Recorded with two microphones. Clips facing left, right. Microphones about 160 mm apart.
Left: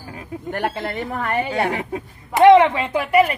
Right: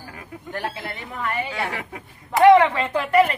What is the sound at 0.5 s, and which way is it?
A woman's voice, 65° left (ahead or behind).